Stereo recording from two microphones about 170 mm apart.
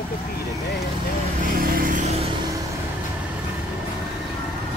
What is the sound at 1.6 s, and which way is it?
Vehicle, 55° right (ahead or behind).